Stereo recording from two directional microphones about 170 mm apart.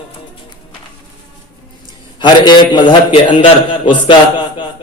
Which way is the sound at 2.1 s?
25° left (ahead or behind).